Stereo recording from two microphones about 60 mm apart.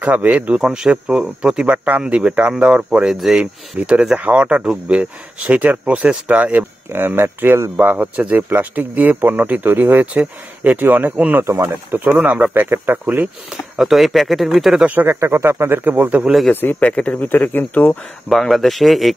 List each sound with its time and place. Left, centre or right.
0.0 s speech: right
0.6 s speech: centre
3.2 s speech: centre
3.7 s speech: centre
6.9 s speech: right
12.0 s speech: centre
12.5 s speech: right
13.7 s speech: centre
14.9 s speech: right
15.1 s speech: right
16.8 s speech: left
18.3 s speech: centre